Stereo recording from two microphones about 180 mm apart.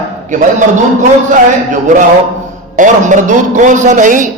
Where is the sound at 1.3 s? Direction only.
45° right (ahead or behind).